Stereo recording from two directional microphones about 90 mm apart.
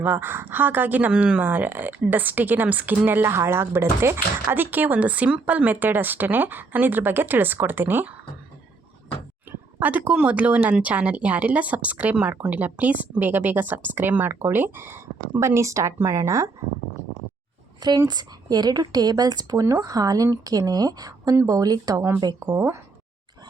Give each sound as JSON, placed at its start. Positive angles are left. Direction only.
{"t": 0.0, "sound": "speech", "side_deg": -20}
{"t": 9.5, "sound": "speech", "side_deg": -15}
{"t": 18.1, "sound": "speech", "side_deg": -50}
{"t": 22.5, "sound": "speech", "side_deg": -30}